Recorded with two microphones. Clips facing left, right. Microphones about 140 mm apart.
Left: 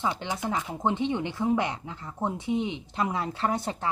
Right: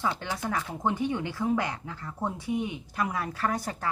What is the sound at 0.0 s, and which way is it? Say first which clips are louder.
A woman's voice: left 1 dB; 20° left (ahead or behind).